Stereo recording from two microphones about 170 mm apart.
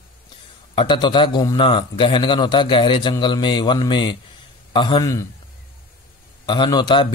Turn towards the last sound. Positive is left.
turn(degrees=25)  # may be behind; listen again after turning